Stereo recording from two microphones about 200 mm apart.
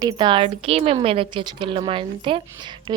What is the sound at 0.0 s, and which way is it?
Speech, 25° right (ahead or behind).